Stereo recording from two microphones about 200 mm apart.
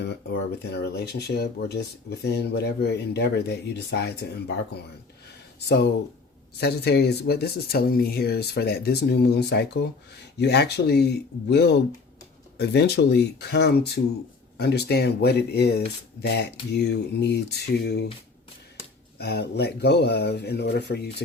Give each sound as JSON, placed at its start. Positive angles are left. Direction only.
{"t": 0.0, "sound": "speech", "side_deg": 55}
{"t": 19.2, "sound": "speech", "side_deg": 55}